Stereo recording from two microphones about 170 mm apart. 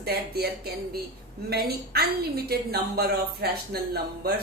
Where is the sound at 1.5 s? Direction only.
65° right (ahead or behind).